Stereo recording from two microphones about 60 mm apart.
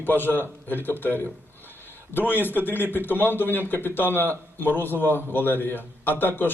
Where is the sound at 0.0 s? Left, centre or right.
Left.